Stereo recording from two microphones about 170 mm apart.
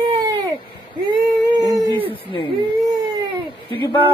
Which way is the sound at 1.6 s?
20° right (ahead or behind).